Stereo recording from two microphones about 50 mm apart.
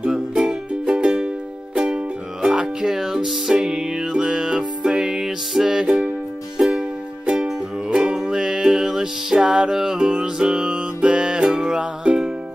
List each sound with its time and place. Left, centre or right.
0.1 s music: centre